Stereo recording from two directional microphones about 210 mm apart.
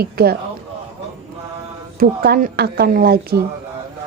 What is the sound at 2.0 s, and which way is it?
A woman's voice, 45° right (ahead or behind).